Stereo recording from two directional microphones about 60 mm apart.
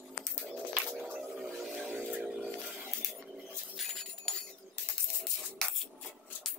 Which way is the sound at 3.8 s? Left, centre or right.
Centre.